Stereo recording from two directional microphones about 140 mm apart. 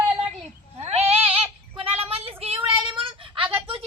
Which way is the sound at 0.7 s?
45° right (ahead or behind).